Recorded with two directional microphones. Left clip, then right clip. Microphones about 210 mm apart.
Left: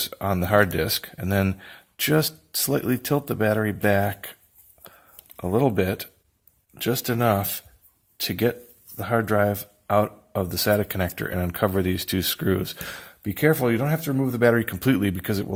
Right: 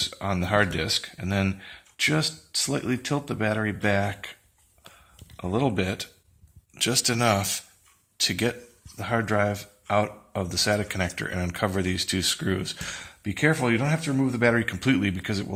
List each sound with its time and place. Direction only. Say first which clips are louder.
0.0 s speech: left 2 dB; 50° left (ahead or behind)
5.4 s speech: left 4 dB; 50° left (ahead or behind)